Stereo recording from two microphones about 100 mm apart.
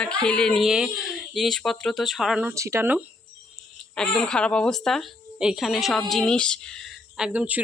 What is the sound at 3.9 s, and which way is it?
Speech, 5° left (ahead or behind).